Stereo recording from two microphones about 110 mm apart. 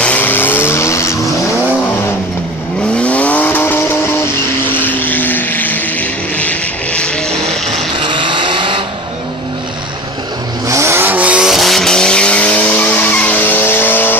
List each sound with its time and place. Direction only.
0.0 s vehicle: 15° left (ahead or behind)
8.0 s vehicle: 50° right (ahead or behind)
10.7 s vehicle: 25° right (ahead or behind); by 14.1 s 20° left (ahead or behind)